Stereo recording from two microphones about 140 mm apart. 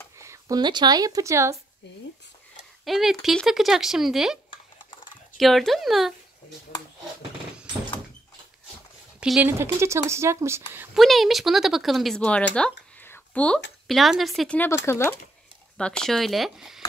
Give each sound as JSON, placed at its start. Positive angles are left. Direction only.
{"t": 0.2, "sound": "speech", "side_deg": -25}
{"t": 2.8, "sound": "speech", "side_deg": 0}
{"t": 5.4, "sound": "speech", "side_deg": 0}
{"t": 9.2, "sound": "speech", "side_deg": -5}
{"t": 9.5, "sound": "speech", "side_deg": -20}
{"t": 11.0, "sound": "speech", "side_deg": 0}
{"t": 14.6, "sound": "speech", "side_deg": 15}
{"t": 15.8, "sound": "speech", "side_deg": 5}